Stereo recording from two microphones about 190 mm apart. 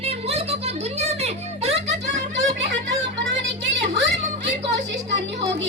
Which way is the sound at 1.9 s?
70° right (ahead or behind).